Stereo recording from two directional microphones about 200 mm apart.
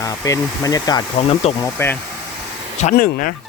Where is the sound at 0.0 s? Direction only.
20° left (ahead or behind).